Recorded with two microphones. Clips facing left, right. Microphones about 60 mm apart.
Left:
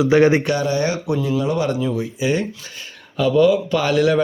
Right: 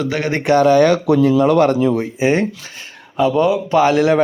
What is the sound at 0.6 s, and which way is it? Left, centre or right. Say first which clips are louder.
Speech: right 9 dB; right.